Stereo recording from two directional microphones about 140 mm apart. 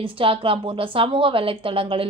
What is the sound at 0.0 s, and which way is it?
A woman's voice, 40° right (ahead or behind).